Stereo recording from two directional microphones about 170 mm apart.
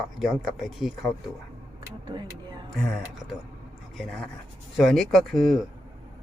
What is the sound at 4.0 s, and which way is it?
Speech, centre (ahead or behind).